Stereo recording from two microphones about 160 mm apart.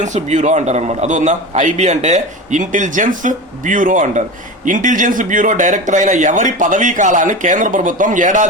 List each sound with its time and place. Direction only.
0.0 s a man's voice: 50° right (ahead or behind)